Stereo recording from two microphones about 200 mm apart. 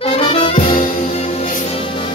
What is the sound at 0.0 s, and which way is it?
Music, 25° left (ahead or behind).